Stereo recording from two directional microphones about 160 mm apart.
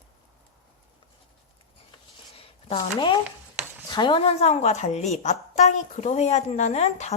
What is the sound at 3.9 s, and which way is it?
A woman's voice, 30° left (ahead or behind).